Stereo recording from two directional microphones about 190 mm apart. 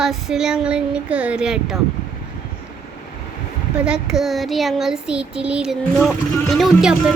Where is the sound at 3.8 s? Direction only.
5° right (ahead or behind).